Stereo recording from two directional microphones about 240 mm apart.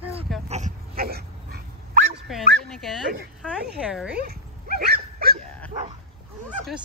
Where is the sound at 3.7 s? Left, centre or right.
Centre.